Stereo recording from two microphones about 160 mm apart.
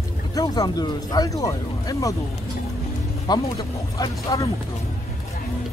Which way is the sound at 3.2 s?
25° left (ahead or behind).